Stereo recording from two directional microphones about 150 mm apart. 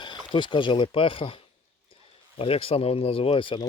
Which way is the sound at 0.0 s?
30° left (ahead or behind).